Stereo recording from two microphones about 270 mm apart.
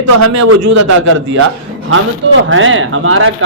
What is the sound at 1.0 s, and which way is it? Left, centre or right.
Speech, right.